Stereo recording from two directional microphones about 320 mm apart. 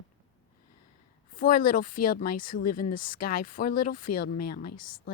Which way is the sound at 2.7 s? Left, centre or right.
Left.